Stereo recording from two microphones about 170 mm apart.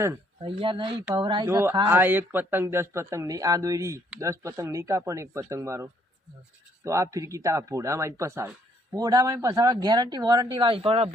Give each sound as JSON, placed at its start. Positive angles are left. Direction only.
{"t": 0.4, "sound": "speech", "side_deg": -30}
{"t": 1.5, "sound": "speech", "side_deg": -15}